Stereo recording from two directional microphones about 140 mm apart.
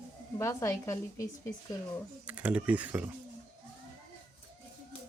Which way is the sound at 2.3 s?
10° right (ahead or behind).